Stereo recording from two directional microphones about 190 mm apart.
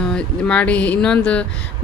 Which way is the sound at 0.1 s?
5° left (ahead or behind).